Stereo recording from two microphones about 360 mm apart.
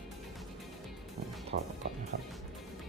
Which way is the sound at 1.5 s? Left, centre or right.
Right.